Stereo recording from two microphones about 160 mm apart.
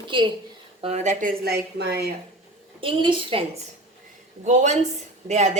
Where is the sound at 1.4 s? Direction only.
85° right.